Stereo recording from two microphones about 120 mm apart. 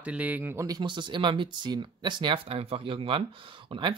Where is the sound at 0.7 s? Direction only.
40° right (ahead or behind).